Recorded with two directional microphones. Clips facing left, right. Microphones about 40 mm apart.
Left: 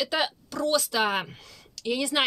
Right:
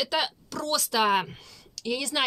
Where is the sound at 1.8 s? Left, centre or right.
Centre.